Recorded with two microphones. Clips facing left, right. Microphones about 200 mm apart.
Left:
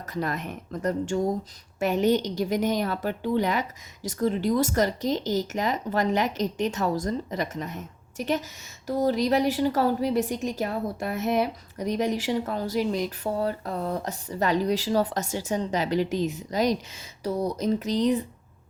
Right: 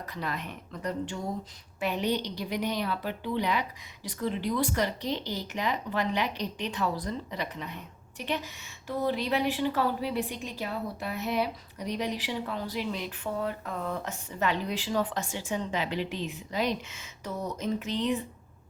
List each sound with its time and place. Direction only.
0.0 s a woman's voice: 45° left (ahead or behind)